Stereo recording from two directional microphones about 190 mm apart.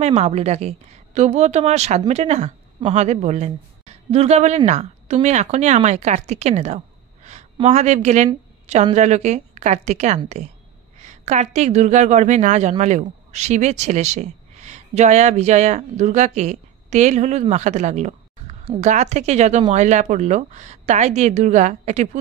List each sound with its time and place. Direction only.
0.0 s a woman's voice: 35° right (ahead or behind)